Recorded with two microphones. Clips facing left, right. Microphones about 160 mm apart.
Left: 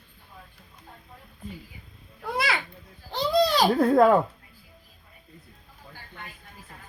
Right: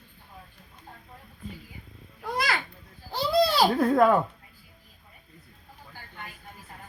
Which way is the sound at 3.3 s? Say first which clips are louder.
Even; 10° right (ahead or behind).